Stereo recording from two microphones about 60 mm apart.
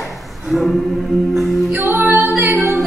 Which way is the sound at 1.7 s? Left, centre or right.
Right.